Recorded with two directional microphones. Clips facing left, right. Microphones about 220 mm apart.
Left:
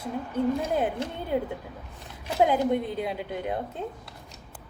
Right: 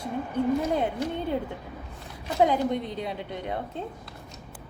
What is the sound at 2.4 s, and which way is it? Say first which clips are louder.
A woman's voice: left 1 dB; 5° left (ahead or behind).